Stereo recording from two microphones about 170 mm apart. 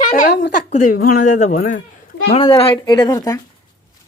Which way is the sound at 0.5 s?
45° left (ahead or behind).